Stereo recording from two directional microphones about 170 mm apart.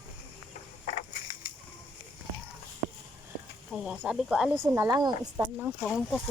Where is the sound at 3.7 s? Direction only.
5° right (ahead or behind).